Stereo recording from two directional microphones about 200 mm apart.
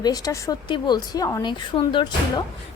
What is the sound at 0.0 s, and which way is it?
A woman's voice, 20° left (ahead or behind).